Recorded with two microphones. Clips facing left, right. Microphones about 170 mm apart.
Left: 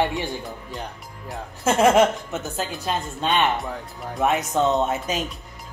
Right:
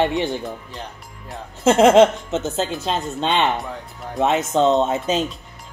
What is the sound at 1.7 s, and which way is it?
Speech, 25° right (ahead or behind).